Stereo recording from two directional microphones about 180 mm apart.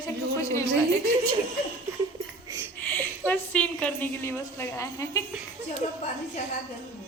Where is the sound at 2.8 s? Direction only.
10° left (ahead or behind).